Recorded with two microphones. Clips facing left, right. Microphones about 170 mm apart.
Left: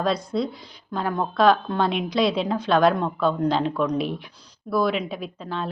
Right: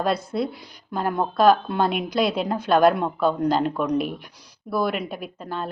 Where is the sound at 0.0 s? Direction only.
5° right (ahead or behind).